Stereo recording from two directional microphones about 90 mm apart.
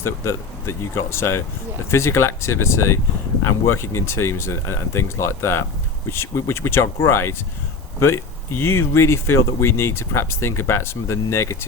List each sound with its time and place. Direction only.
0.0 s speech: 30° left (ahead or behind)